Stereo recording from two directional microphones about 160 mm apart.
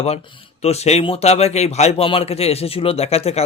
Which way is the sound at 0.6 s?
40° left (ahead or behind).